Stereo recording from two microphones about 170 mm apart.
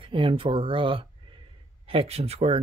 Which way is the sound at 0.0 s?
30° right (ahead or behind).